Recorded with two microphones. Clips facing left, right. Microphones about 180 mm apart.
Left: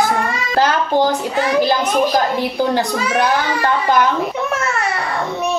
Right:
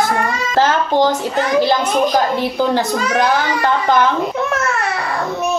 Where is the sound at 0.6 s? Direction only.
10° left (ahead or behind).